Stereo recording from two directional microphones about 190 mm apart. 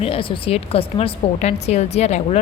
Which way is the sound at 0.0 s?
30° left (ahead or behind).